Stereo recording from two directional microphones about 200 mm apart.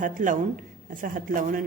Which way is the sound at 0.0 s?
40° right (ahead or behind).